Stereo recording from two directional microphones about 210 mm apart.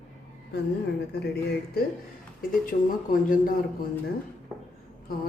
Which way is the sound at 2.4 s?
40° left (ahead or behind).